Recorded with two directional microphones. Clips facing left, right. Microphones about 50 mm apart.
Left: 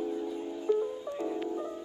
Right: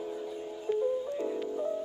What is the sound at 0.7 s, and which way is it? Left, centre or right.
Music, right.